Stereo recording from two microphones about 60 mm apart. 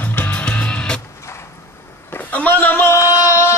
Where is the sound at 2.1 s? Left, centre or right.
Left.